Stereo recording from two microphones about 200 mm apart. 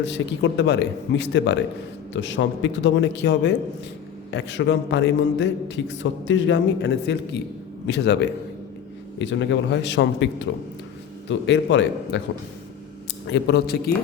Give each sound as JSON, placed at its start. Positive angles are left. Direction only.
{"t": 0.0, "sound": "a man's voice", "side_deg": 65}
{"t": 13.2, "sound": "a man's voice", "side_deg": 60}